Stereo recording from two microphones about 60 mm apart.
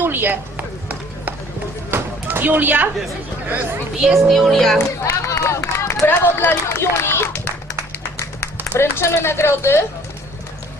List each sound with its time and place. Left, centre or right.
0.0 s run: right
1.9 s a sound: right
4.0 s speech: centre
5.0 s speech: left
6.1 s speech: left
8.8 s speech: left